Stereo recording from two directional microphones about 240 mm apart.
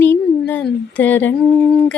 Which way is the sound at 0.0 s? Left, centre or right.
Centre.